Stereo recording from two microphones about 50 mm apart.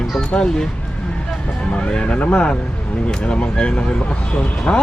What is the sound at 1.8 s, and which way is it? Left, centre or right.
A man's voice, left.